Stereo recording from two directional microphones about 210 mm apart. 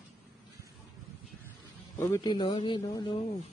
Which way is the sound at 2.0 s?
15° left (ahead or behind).